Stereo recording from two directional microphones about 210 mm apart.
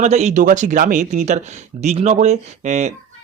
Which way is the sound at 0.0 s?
30° right (ahead or behind).